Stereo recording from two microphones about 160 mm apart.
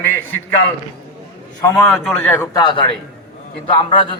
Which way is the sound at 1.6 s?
15° left (ahead or behind).